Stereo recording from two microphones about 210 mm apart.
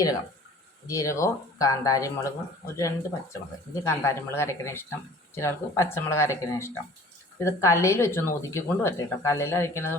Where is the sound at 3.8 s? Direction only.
15° left (ahead or behind).